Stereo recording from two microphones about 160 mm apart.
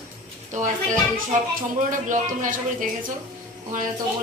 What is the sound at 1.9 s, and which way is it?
Speech, 55° right (ahead or behind).